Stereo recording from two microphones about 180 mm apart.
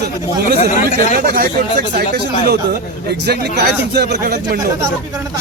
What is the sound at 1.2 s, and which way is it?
Speech, 55° right (ahead or behind).